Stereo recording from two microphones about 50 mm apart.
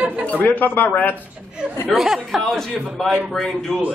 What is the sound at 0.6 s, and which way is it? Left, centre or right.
Speech, left.